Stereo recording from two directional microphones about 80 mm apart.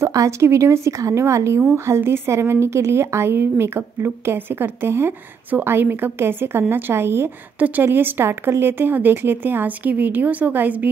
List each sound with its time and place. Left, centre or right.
0.0 s a woman's voice: right
7.5 s a woman's voice: centre